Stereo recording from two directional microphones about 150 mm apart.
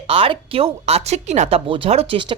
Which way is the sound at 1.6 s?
40° right (ahead or behind).